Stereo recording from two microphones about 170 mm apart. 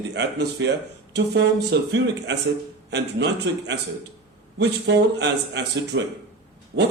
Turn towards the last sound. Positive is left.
turn(degrees=-90)